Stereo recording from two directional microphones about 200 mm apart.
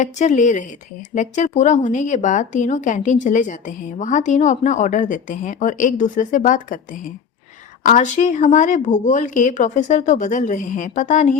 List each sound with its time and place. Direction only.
0.0 s speech: 35° left (ahead or behind)
7.9 s speech: 40° left (ahead or behind)